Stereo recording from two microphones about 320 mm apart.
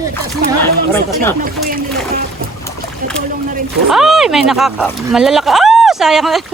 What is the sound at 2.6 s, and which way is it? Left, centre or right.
Boat, centre.